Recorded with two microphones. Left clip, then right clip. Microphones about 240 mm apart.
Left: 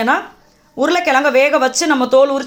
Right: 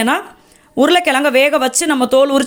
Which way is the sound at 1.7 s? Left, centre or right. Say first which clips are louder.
Left 1 dB; right.